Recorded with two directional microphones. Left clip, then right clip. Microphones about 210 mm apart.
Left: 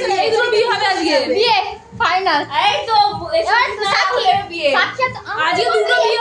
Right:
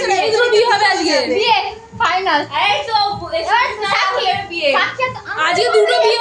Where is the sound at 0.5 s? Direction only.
35° right (ahead or behind).